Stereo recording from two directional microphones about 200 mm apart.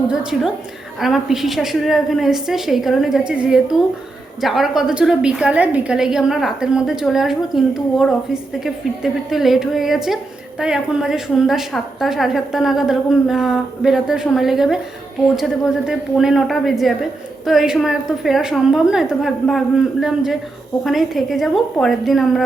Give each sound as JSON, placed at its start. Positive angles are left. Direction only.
{"t": 0.1, "sound": "a woman's voice", "side_deg": -5}
{"t": 15.9, "sound": "a woman's voice", "side_deg": 0}